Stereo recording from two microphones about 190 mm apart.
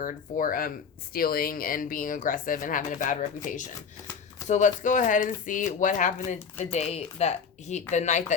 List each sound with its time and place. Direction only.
0.0 s speech: 45° left (ahead or behind)